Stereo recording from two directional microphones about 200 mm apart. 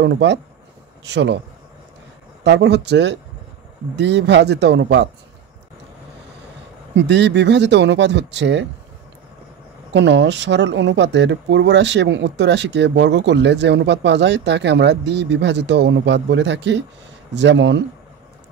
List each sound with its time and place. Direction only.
0.0 s speech: 60° right (ahead or behind)
2.4 s speech: 60° right (ahead or behind)
7.0 s speech: 60° right (ahead or behind)
9.8 s speech: 60° right (ahead or behind)